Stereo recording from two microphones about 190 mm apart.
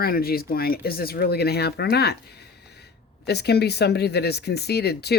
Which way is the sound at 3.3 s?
60° left (ahead or behind).